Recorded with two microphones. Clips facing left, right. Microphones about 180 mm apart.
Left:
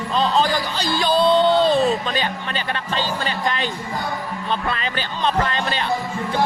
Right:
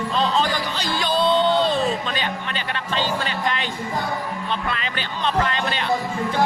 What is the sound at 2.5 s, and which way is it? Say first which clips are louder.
Speech: left 2 dB; 40° left (ahead or behind).